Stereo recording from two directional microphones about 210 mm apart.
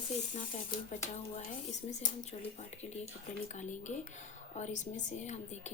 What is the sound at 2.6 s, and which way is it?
A woman's voice, 30° left (ahead or behind).